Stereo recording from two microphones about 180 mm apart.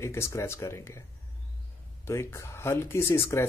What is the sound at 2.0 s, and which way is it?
Speech, 15° left (ahead or behind).